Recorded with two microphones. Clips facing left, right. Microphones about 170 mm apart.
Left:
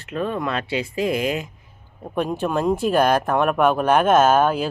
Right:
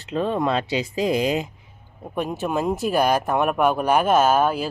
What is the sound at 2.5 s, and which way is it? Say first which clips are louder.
Speech: left 2 dB; 5° right (ahead or behind).